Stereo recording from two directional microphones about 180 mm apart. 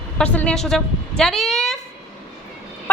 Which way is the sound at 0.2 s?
5° left (ahead or behind).